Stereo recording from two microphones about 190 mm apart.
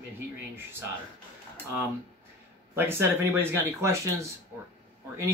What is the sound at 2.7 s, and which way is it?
Speech, 10° right (ahead or behind).